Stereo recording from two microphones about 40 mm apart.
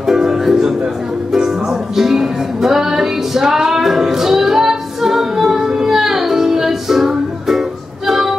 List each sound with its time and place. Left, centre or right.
0.0 s ukulele: centre
1.3 s music: centre